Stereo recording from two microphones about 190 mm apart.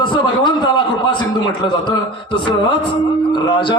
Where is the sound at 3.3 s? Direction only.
20° left (ahead or behind).